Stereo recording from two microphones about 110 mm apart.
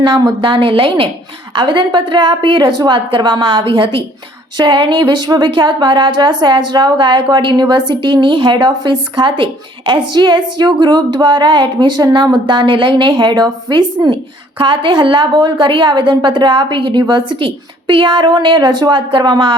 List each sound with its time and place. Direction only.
0.0 s a woman's voice: 45° right (ahead or behind)